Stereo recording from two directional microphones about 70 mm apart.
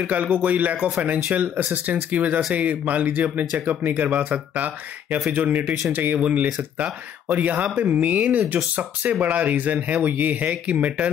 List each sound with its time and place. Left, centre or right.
0.0 s speech: right